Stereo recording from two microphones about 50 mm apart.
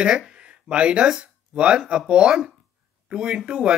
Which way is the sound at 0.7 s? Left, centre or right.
Right.